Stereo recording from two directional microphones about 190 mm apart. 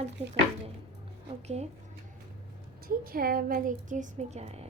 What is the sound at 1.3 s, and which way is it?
Speech, 35° right (ahead or behind).